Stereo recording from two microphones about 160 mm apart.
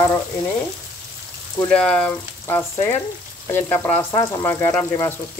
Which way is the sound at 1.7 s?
5° left (ahead or behind).